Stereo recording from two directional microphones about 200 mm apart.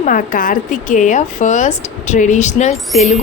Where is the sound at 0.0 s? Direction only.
45° left (ahead or behind).